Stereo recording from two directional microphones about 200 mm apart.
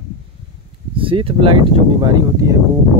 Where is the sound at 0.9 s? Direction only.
25° right (ahead or behind).